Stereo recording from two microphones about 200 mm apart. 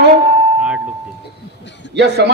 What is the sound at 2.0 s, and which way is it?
Speech, 55° right (ahead or behind).